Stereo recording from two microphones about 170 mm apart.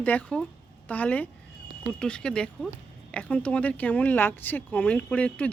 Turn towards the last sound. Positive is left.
turn(degrees=5)  # may be behind; listen again after turning